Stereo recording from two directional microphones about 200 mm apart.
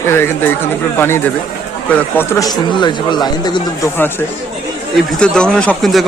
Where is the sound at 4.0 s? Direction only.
10° left (ahead or behind).